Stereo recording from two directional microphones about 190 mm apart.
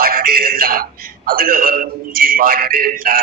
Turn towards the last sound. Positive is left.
turn(degrees=-50)  # may be behind; listen again after turning